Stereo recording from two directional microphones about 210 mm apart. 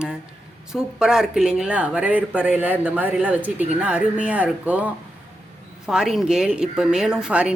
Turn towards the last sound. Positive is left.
turn(degrees=-5)  # may be behind; listen again after turning